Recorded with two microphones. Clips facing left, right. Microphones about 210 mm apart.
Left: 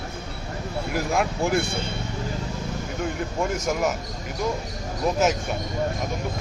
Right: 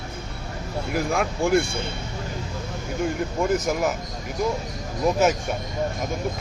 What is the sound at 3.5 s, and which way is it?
Speech, centre (ahead or behind).